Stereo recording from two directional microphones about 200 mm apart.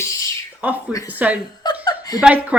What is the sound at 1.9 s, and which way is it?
Chuckle, 20° left (ahead or behind).